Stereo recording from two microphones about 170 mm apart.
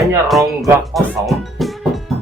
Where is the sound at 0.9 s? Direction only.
Centre (ahead or behind).